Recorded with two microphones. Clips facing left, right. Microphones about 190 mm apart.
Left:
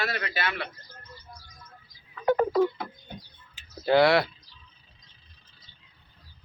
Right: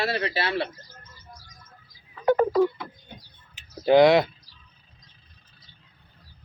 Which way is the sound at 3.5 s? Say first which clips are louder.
Right 4 dB; 20° right (ahead or behind).